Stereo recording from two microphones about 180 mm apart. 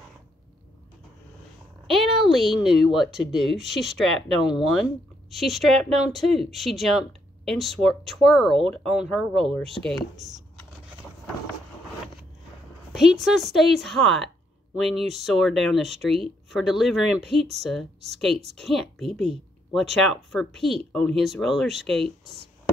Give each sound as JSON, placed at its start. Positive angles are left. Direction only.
{"t": 1.9, "sound": "speech", "side_deg": 0}
{"t": 10.1, "sound": "speech", "side_deg": -40}
{"t": 12.9, "sound": "speech", "side_deg": 0}